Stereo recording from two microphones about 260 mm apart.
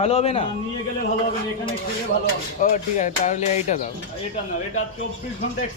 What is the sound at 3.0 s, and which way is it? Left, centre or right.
Speech, left.